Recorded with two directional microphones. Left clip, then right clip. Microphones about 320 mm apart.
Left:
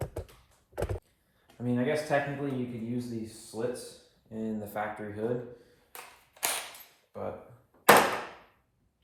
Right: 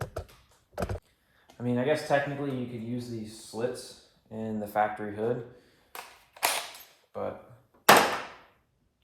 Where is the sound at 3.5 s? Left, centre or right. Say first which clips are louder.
Right 2 dB; centre.